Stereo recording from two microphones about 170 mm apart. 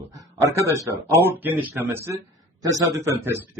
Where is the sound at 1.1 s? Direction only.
10° right (ahead or behind).